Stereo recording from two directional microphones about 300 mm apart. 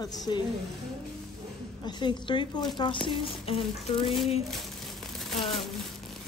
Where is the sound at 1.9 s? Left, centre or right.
Centre.